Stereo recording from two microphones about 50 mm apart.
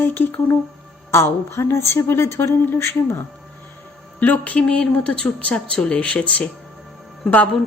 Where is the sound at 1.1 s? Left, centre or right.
Left.